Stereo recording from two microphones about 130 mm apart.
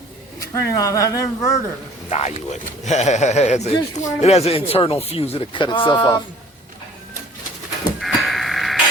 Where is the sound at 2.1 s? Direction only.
60° left (ahead or behind); by 6.2 s 35° left (ahead or behind).